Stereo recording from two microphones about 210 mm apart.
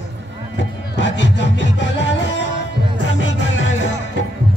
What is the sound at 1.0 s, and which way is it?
Music, 60° left (ahead or behind).